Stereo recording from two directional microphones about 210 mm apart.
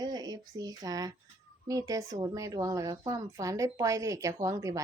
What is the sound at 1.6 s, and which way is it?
Speech, 15° right (ahead or behind).